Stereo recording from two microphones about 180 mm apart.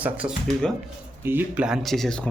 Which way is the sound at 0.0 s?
5° right (ahead or behind).